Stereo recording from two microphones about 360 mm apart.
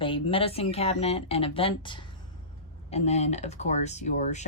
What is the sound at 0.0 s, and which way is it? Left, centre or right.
Speech, centre.